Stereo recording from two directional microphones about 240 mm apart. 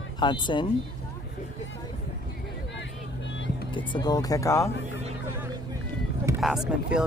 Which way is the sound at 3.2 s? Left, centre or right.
Left.